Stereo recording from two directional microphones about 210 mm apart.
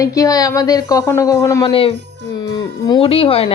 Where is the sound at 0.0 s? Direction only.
15° left (ahead or behind).